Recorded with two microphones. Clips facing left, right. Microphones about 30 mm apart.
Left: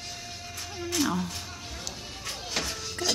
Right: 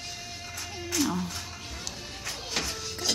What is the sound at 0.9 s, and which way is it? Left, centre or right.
Music, centre.